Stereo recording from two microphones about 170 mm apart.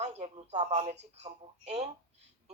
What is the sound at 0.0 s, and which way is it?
Speech, 40° right (ahead or behind).